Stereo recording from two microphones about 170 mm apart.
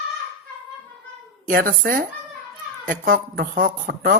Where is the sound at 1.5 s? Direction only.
60° right (ahead or behind).